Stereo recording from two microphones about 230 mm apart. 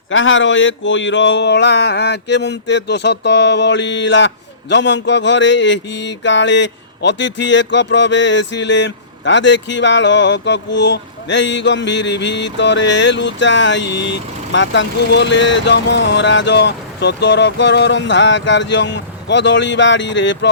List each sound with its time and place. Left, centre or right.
0.1 s mantra: left